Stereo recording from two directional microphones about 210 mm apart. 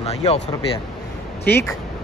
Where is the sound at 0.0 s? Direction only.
30° left (ahead or behind).